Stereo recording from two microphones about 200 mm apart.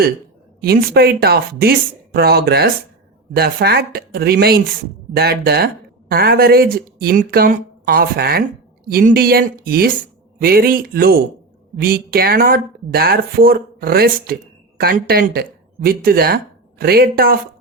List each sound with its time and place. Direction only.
0.6 s speech: 50° right (ahead or behind)